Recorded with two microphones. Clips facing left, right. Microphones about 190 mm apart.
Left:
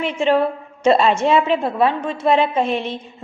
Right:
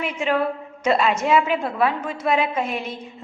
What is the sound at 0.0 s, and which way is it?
A woman's voice, 30° left (ahead or behind).